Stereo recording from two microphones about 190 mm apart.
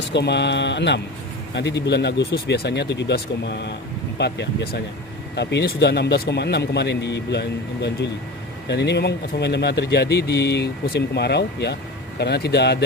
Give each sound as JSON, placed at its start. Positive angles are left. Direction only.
{"t": 0.1, "sound": "speech", "side_deg": 65}